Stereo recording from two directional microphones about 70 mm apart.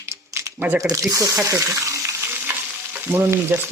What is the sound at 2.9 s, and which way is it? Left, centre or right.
Frying, right.